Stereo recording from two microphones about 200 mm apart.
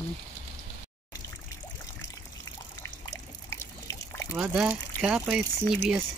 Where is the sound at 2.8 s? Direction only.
65° left (ahead or behind).